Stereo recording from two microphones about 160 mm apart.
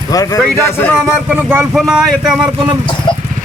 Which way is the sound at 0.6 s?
10° left (ahead or behind).